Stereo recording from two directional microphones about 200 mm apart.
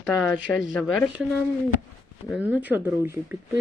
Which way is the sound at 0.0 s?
5° left (ahead or behind).